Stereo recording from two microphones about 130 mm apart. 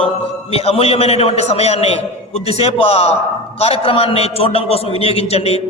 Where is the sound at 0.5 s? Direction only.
50° left (ahead or behind).